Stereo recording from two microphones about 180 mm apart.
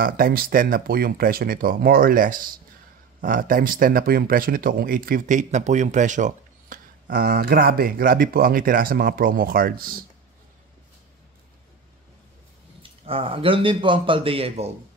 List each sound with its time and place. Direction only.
0.0 s speech: 55° right (ahead or behind)
13.0 s a man's voice: 30° right (ahead or behind)